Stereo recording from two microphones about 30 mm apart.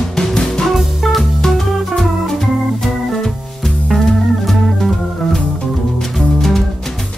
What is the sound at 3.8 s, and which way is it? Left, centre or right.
Music, centre.